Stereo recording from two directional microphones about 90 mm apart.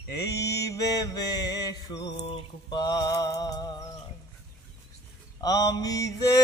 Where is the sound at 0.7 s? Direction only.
45° left (ahead or behind).